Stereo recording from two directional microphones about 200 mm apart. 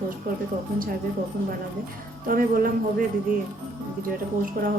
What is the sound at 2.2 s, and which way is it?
Speech, 45° right (ahead or behind).